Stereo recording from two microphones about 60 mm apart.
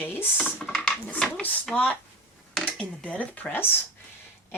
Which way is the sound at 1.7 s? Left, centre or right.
Centre.